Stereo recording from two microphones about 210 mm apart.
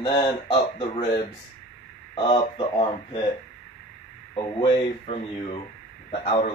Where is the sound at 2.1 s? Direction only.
25° left (ahead or behind).